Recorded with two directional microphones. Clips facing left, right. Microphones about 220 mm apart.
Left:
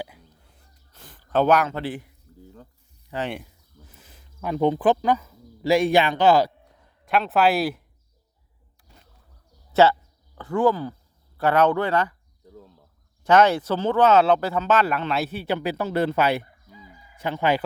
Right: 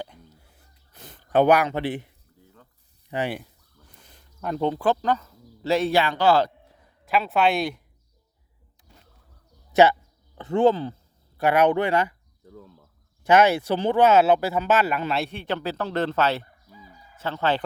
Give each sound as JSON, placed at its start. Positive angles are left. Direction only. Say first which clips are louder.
{"t": 0.9, "sound": "a sound", "louder": "right 3 dB", "side_deg": -20}
{"t": 1.3, "sound": "speech", "louder": "right 1 dB", "side_deg": -15}
{"t": 2.4, "sound": "a sound", "louder": "left 8 dB", "side_deg": 35}
{"t": 3.1, "sound": "speech", "louder": "right 2 dB", "side_deg": -10}
{"t": 3.3, "sound": "a sound", "louder": "even", "side_deg": 5}
{"t": 4.7, "sound": "speech", "louder": "left 3 dB", "side_deg": 15}
{"t": 7.0, "sound": "speech", "louder": "left 1 dB", "side_deg": 0}
{"t": 9.8, "sound": "speech", "louder": "even", "side_deg": -15}
{"t": 11.3, "sound": "speech", "louder": "even", "side_deg": -15}
{"t": 13.2, "sound": "speech", "louder": "even", "side_deg": -10}
{"t": 16.7, "sound": "chicken", "louder": "left 1 dB", "side_deg": 15}